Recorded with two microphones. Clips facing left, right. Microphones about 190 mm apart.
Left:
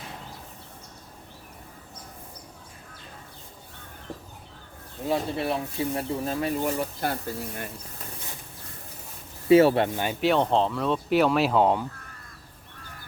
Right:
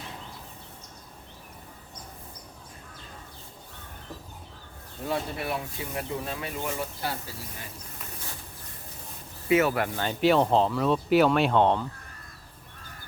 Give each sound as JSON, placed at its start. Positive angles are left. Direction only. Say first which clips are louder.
{"t": 5.0, "sound": "speech", "louder": "left 4 dB", "side_deg": 25}
{"t": 9.5, "sound": "speech", "louder": "left 6 dB", "side_deg": 30}
{"t": 10.2, "sound": "speech", "louder": "right 1 dB", "side_deg": 0}